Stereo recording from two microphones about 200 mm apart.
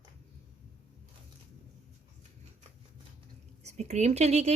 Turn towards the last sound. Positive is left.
turn(degrees=-35)  # may be behind; listen again after turning